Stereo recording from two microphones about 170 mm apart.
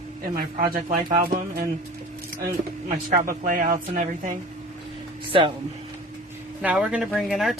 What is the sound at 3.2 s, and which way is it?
Speech, 55° right (ahead or behind).